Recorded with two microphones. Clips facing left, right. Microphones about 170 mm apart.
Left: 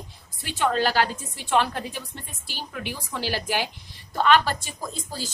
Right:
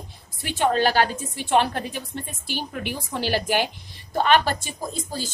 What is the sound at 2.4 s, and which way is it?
A woman's voice, 55° right (ahead or behind).